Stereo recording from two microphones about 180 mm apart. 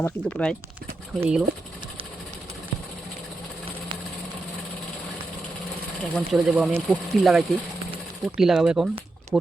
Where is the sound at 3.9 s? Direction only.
25° right (ahead or behind).